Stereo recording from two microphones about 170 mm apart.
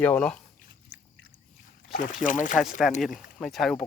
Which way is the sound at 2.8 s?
Centre (ahead or behind).